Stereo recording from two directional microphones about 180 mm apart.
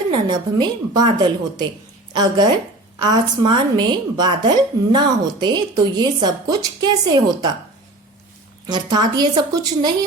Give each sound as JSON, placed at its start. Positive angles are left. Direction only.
{"t": 0.1, "sound": "a woman's voice", "side_deg": -25}
{"t": 8.6, "sound": "a woman's voice", "side_deg": -25}